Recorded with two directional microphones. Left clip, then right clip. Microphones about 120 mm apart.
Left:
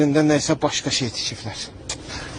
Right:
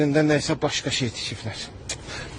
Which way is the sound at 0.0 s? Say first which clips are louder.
Left 3 dB; 30° right (ahead or behind).